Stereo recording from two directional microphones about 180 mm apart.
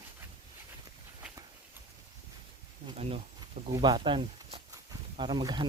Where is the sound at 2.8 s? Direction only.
35° right (ahead or behind).